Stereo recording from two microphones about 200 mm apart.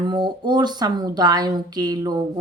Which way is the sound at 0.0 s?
20° right (ahead or behind).